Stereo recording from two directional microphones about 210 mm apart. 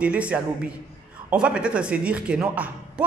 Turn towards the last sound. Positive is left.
turn(degrees=-5)  # may be behind; listen again after turning